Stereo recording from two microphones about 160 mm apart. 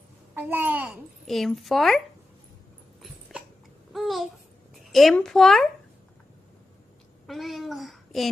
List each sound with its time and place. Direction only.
0.3 s a child's voice: 15° right (ahead or behind)
1.2 s speech: centre (ahead or behind)
3.9 s babbling: centre (ahead or behind)
4.8 s a child's voice: centre (ahead or behind)
7.3 s a sound: centre (ahead or behind)